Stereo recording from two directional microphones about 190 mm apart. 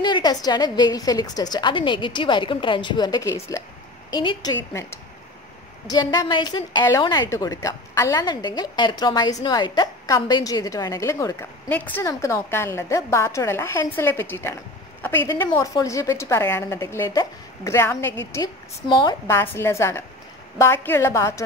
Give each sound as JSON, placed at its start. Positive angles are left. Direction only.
{"t": 0.0, "sound": "a woman's voice", "side_deg": 20}
{"t": 19.2, "sound": "a woman's voice", "side_deg": 15}